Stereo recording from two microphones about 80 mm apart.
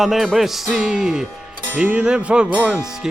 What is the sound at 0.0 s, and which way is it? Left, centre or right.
Music, centre.